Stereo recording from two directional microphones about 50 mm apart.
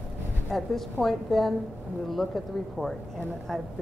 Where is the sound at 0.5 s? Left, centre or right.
Centre.